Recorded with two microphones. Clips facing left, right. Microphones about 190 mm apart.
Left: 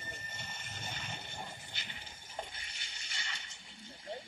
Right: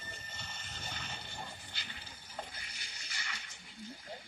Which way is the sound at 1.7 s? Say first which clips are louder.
Even; 20° left (ahead or behind).